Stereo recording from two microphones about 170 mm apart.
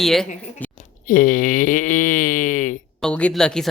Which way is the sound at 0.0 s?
Centre (ahead or behind).